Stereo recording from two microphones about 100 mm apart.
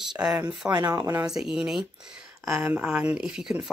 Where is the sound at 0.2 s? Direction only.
20° right (ahead or behind).